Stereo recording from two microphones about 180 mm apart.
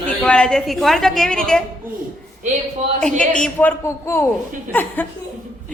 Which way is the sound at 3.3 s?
10° left (ahead or behind).